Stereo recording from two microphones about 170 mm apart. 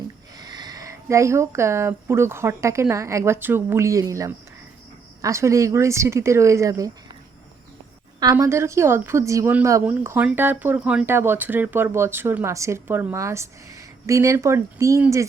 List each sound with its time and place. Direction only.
0.3 s a woman's voice: 25° right (ahead or behind)
8.2 s a woman's voice: 20° right (ahead or behind)